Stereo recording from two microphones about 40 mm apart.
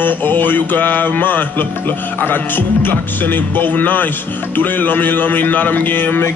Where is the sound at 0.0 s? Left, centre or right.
Left.